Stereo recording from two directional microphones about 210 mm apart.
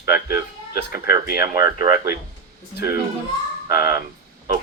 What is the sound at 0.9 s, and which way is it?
Speech, 15° right (ahead or behind).